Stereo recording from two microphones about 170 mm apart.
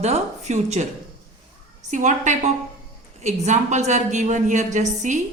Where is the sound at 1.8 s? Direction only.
45° right (ahead or behind).